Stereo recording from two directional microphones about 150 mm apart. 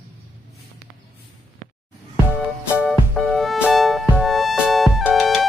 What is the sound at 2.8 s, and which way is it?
Music, centre (ahead or behind).